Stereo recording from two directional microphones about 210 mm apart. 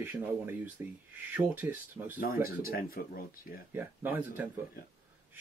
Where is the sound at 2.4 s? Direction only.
45° left (ahead or behind).